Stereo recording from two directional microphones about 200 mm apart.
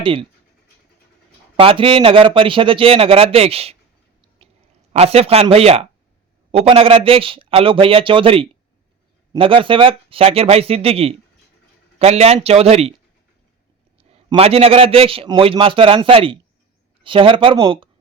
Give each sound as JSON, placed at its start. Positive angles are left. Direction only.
{"t": 0.0, "sound": "speech", "side_deg": -25}
{"t": 1.5, "sound": "a man's voice", "side_deg": -25}
{"t": 4.9, "sound": "a man's voice", "side_deg": -30}
{"t": 14.0, "sound": "a man's voice", "side_deg": -30}